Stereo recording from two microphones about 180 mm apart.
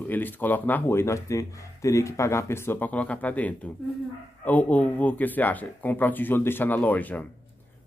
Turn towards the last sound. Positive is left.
turn(degrees=10)  # may be behind; listen again after turning